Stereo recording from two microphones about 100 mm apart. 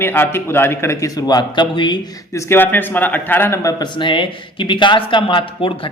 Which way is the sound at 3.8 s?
55° left (ahead or behind).